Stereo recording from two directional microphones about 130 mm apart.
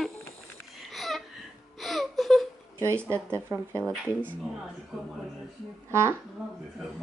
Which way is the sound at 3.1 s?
20° right (ahead or behind).